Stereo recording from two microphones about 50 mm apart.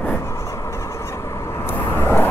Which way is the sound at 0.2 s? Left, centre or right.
Left.